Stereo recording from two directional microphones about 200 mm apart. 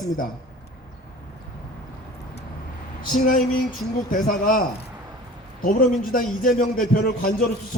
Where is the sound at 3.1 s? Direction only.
40° left (ahead or behind).